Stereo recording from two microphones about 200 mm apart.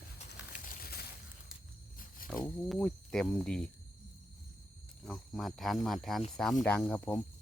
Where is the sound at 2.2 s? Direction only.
45° left (ahead or behind).